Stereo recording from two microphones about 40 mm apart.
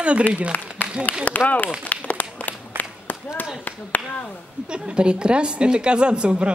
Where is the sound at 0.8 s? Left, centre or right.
Left.